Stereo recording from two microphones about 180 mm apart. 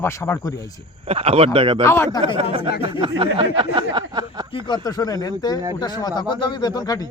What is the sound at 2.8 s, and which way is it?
Speech, 30° right (ahead or behind).